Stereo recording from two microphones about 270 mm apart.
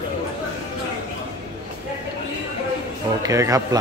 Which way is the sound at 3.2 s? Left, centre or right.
Centre.